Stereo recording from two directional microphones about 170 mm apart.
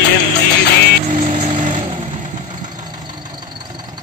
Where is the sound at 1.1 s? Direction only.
50° right (ahead or behind).